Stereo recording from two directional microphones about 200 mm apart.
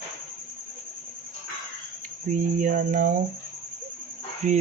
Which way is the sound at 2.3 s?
40° right (ahead or behind).